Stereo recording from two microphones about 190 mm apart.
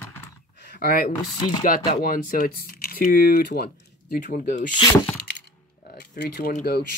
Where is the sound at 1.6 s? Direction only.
45° left (ahead or behind).